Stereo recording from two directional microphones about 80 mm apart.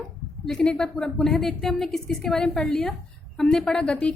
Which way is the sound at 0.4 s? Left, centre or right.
Centre.